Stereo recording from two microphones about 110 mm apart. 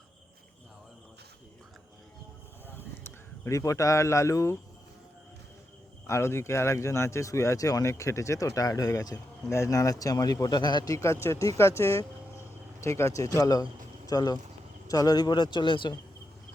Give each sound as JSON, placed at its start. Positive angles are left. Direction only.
{"t": 2.6, "sound": "a sound", "side_deg": 20}
{"t": 6.1, "sound": "speech", "side_deg": 25}
{"t": 10.9, "sound": "a man's voice", "side_deg": 25}